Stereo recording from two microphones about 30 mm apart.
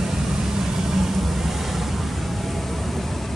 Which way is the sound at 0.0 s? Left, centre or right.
Centre.